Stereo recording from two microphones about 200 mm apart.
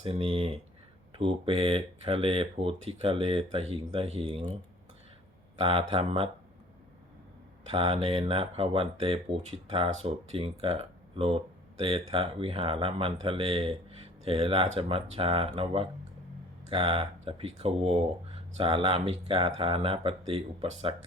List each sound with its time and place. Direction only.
0.0 s speech: 30° right (ahead or behind)
5.5 s speech: 30° right (ahead or behind)
7.6 s speech: 30° right (ahead or behind)